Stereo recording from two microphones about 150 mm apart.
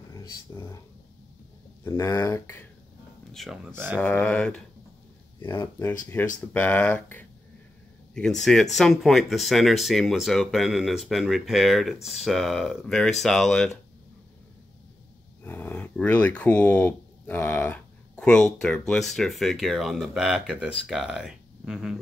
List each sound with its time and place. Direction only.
0.1 s speech: 20° left (ahead or behind)
1.9 s speech: 20° left (ahead or behind)
3.4 s speech: centre (ahead or behind)
3.7 s speech: 15° right (ahead or behind)
4.0 s speech: 10° left (ahead or behind)
15.4 s speech: 10° left (ahead or behind); by 21.9 s 5° right (ahead or behind)